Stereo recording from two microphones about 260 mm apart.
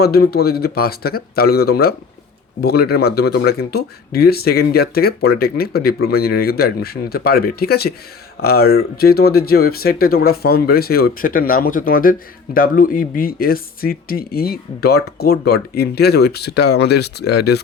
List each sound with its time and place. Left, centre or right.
0.0 s speech: left